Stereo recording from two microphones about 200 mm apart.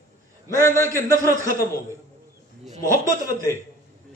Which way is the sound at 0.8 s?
15° right (ahead or behind).